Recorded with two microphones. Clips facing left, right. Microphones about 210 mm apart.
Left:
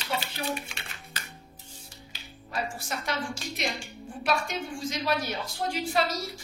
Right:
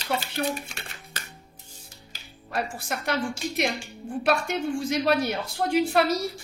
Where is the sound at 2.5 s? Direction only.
60° right (ahead or behind).